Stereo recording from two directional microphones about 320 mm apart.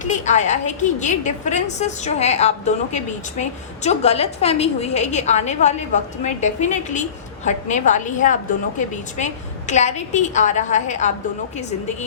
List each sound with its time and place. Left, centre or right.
0.0 s a woman's voice: left